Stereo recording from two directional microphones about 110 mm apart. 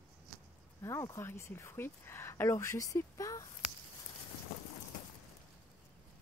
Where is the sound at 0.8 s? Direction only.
25° left (ahead or behind).